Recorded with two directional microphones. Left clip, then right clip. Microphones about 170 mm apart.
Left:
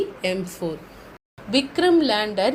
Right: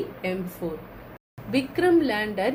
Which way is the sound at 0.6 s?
55° left (ahead or behind).